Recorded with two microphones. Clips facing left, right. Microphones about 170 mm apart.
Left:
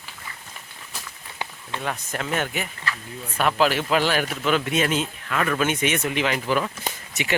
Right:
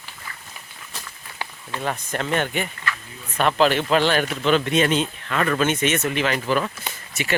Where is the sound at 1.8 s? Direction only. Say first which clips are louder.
Right 3 dB; centre (ahead or behind).